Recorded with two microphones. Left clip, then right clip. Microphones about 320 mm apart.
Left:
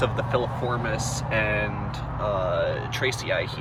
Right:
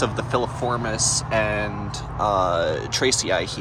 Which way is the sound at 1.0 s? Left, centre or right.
Right.